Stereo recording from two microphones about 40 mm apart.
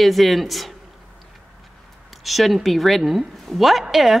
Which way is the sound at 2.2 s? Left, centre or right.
Centre.